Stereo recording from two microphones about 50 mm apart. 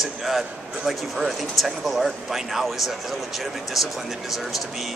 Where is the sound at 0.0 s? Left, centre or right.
Centre.